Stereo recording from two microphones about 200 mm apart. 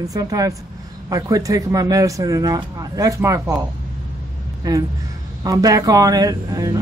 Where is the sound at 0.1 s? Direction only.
20° right (ahead or behind).